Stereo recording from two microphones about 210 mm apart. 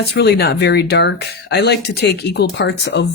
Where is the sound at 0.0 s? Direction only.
50° left (ahead or behind).